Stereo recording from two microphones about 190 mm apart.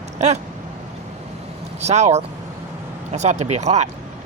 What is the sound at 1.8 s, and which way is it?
Speech, 35° right (ahead or behind).